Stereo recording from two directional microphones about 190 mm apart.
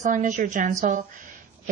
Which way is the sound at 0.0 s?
40° right (ahead or behind).